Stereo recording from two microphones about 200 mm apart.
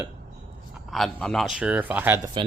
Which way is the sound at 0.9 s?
Centre (ahead or behind).